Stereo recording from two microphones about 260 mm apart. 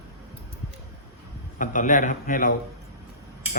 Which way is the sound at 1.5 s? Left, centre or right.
Left.